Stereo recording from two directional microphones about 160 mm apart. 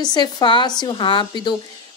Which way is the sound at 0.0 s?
25° left (ahead or behind).